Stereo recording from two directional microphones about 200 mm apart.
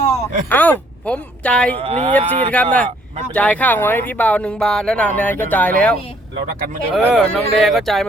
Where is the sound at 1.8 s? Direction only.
30° right (ahead or behind).